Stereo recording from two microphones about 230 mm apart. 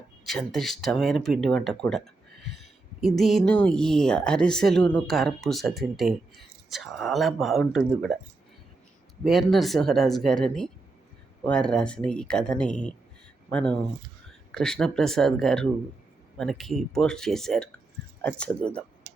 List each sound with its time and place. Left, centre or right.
0.3 s speech: centre
9.2 s speech: centre